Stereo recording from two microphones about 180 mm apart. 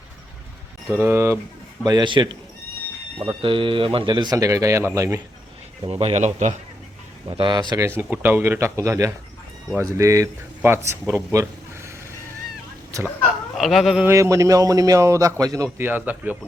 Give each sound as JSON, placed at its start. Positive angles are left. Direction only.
{"t": 1.0, "sound": "a man's voice", "side_deg": -15}
{"t": 3.4, "sound": "a man's voice", "side_deg": -30}
{"t": 5.8, "sound": "speech", "side_deg": -35}
{"t": 7.3, "sound": "a man's voice", "side_deg": -25}
{"t": 13.2, "sound": "speech", "side_deg": 0}
{"t": 14.1, "sound": "a man's voice", "side_deg": -15}